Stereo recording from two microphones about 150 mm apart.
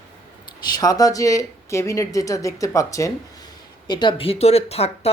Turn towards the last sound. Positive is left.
turn(degrees=45)  # may be behind; listen again after turning